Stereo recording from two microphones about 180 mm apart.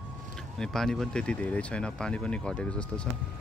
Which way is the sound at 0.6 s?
Centre (ahead or behind).